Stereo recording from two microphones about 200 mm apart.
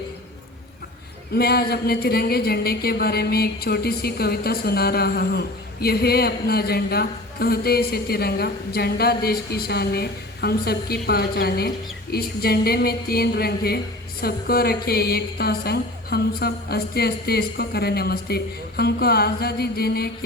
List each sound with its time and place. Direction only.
1.4 s speech: 50° left (ahead or behind)